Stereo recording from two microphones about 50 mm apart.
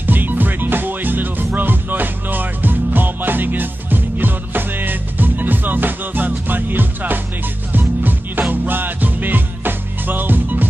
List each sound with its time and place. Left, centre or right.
0.0 s music: right